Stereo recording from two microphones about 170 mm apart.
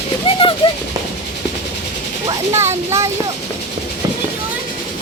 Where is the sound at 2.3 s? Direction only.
15° right (ahead or behind).